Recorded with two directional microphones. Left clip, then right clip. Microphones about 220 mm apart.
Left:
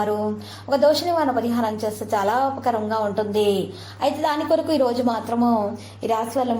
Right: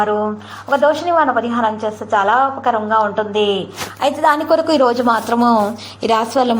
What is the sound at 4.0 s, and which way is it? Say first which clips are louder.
A woman's voice: right 7 dB; 15° right (ahead or behind).